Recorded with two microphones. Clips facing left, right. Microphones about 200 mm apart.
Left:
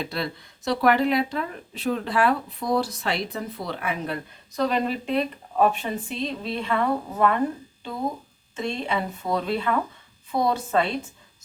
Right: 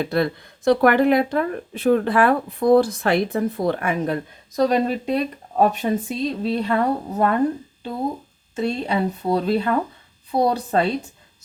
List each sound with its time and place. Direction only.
0.0 s speech: 55° right (ahead or behind)
8.5 s speech: 35° right (ahead or behind)